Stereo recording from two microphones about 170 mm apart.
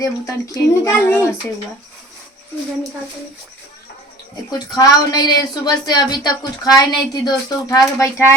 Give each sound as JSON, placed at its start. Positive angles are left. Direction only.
{"t": 0.0, "sound": "speech", "side_deg": 20}
{"t": 4.5, "sound": "a woman's voice", "side_deg": 25}